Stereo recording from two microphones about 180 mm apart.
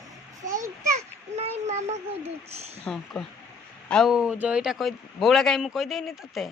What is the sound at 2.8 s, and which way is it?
Speech, 5° left (ahead or behind).